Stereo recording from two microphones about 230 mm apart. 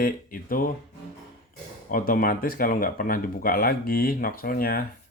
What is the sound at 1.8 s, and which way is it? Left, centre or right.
Speech, left.